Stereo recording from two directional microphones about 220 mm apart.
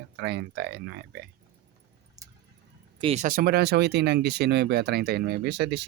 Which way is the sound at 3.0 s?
30° right (ahead or behind).